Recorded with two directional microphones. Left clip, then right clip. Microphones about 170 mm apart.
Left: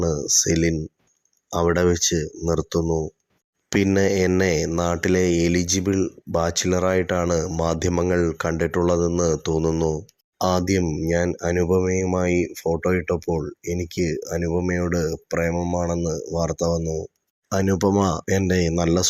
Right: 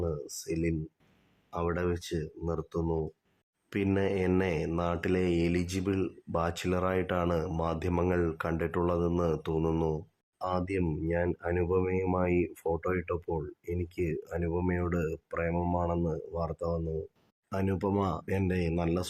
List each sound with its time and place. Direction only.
0.0 s speech: 30° left (ahead or behind)
13.9 s speech: 15° left (ahead or behind); by 19.0 s 30° left (ahead or behind)